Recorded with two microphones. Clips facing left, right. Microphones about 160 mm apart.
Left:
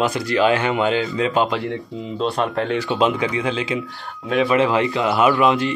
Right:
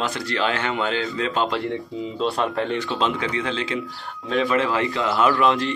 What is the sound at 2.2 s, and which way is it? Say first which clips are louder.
Speech: left 2 dB; centre (ahead or behind).